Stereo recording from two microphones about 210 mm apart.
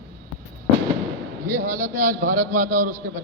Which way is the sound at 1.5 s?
15° right (ahead or behind).